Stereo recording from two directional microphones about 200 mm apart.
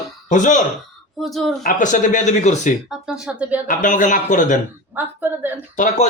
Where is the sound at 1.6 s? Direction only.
40° left (ahead or behind).